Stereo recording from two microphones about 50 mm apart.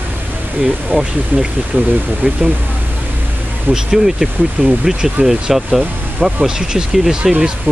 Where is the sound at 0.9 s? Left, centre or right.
Centre.